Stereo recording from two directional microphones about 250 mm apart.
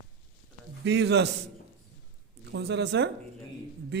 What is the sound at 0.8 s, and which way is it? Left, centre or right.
Speech, right.